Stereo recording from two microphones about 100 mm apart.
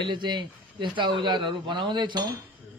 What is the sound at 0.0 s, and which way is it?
A man's voice, 50° right (ahead or behind).